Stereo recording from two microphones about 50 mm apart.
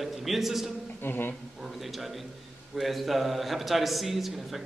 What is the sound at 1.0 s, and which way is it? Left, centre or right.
Speech, left.